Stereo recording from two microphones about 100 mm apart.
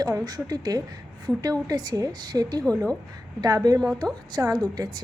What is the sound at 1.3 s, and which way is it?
Speech, 5° left (ahead or behind).